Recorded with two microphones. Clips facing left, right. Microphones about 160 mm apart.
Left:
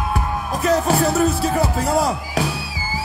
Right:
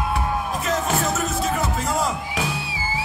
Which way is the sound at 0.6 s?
35° left (ahead or behind).